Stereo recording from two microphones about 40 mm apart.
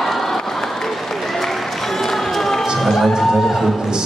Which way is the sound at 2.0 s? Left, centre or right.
Centre.